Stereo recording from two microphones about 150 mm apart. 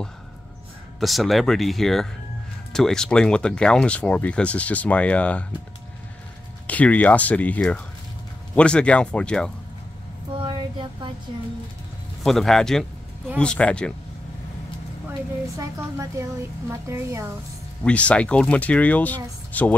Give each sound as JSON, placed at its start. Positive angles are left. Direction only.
{"t": 0.9, "sound": "speech", "side_deg": 0}
{"t": 6.7, "sound": "speech", "side_deg": 10}
{"t": 10.3, "sound": "a sound", "side_deg": -35}
{"t": 12.2, "sound": "speech", "side_deg": 0}
{"t": 15.0, "sound": "speech", "side_deg": -20}
{"t": 17.8, "sound": "speech", "side_deg": 10}